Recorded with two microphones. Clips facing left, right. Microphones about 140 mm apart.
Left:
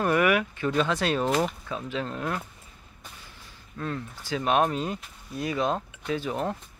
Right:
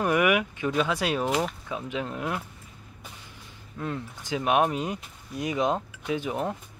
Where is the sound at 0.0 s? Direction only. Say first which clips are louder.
Even; 15° right (ahead or behind).